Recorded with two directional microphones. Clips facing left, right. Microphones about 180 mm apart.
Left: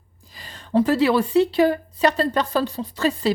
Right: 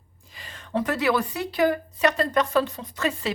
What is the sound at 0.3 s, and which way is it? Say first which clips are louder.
A woman's voice: left 7 dB; 35° left (ahead or behind).